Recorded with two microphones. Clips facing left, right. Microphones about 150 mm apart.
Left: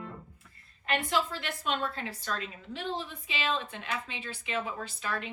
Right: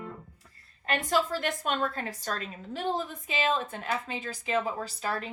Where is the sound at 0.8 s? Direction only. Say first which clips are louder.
Right 2 dB; 45° right (ahead or behind).